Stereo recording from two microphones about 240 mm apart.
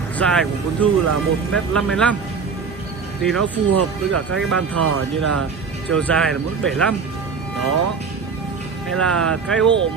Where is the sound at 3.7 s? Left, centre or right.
Right.